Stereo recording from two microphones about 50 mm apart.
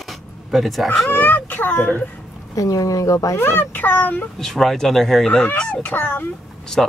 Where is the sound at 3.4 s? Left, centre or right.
Left.